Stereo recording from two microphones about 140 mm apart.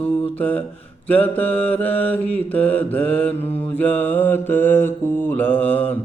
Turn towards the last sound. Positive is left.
turn(degrees=10)  # may be behind; listen again after turning